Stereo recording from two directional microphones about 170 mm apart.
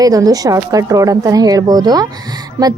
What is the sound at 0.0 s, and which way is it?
Speech, 20° right (ahead or behind).